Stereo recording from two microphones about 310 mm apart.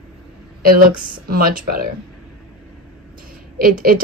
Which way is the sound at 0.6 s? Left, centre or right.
Right.